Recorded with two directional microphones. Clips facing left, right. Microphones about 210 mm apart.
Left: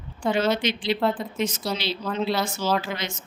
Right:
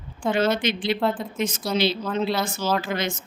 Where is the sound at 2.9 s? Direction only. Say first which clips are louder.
Right 5 dB; 50° right (ahead or behind).